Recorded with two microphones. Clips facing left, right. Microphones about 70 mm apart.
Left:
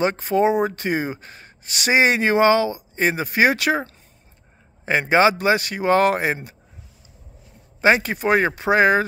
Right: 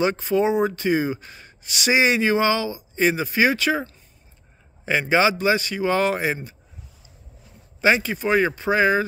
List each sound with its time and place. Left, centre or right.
0.0 s speech: left
4.8 s speech: left
7.8 s speech: left